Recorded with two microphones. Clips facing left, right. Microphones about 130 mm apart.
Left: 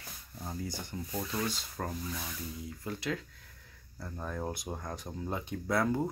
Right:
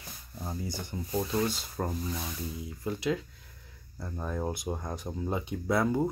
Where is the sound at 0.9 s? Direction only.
25° right (ahead or behind).